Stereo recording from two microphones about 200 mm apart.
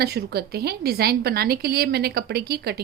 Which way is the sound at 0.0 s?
55° right (ahead or behind).